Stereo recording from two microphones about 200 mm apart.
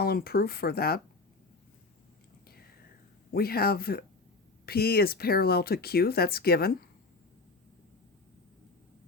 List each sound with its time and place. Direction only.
0.0 s speech: 50° left (ahead or behind)
3.3 s speech: 50° left (ahead or behind)